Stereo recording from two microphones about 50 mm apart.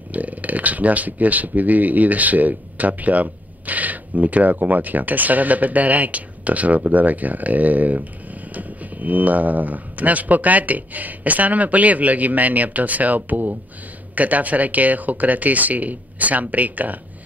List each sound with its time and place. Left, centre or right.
0.1 s speech: right